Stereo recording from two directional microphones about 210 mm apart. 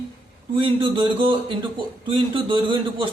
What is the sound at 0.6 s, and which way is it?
A man's voice, 25° right (ahead or behind).